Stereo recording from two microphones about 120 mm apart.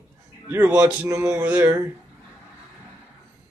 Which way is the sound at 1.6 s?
20° right (ahead or behind).